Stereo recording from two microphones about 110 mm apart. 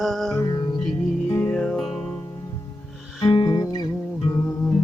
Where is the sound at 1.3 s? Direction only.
20° left (ahead or behind).